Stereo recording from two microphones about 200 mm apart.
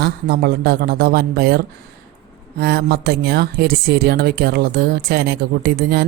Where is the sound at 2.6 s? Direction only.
55° right (ahead or behind).